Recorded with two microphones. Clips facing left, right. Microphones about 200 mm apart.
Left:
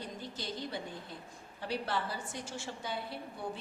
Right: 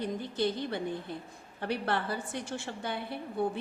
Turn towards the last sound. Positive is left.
turn(degrees=-60)  # may be behind; listen again after turning